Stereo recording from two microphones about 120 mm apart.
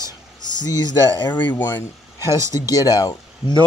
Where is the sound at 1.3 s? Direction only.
15° left (ahead or behind).